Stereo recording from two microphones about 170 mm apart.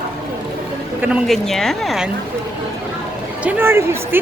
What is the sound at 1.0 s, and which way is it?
Speech, 5° right (ahead or behind).